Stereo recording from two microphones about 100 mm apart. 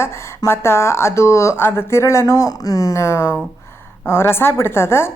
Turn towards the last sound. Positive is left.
turn(degrees=25)  # may be behind; listen again after turning